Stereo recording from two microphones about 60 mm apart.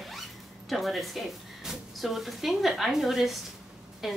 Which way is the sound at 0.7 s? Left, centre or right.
Centre.